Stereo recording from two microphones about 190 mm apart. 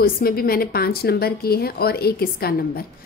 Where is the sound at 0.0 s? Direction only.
50° left (ahead or behind).